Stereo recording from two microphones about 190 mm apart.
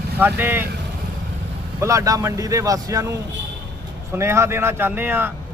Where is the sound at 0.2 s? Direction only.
10° right (ahead or behind).